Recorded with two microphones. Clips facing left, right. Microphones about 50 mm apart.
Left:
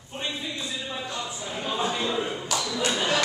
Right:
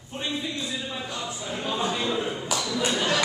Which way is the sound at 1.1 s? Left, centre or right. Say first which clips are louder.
Right 1 dB; centre.